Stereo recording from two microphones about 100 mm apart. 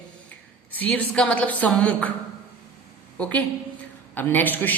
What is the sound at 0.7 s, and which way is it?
A woman's voice, 15° left (ahead or behind).